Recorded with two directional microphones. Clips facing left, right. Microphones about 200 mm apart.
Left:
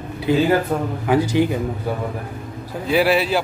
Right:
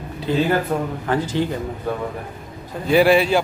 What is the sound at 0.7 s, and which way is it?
Speech, centre (ahead or behind).